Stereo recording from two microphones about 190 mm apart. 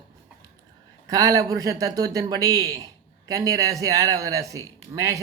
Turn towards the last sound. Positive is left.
turn(degrees=-15)  # may be behind; listen again after turning